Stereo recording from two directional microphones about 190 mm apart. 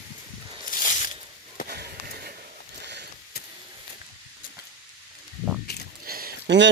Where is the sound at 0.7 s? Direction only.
45° left (ahead or behind).